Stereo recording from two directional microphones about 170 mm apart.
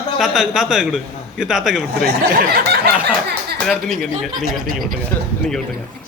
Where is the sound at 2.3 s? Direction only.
60° right (ahead or behind).